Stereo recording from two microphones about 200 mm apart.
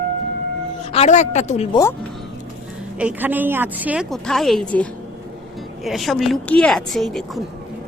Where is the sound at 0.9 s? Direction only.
35° left (ahead or behind).